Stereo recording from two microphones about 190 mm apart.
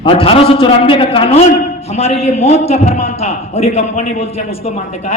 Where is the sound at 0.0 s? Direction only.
30° left (ahead or behind).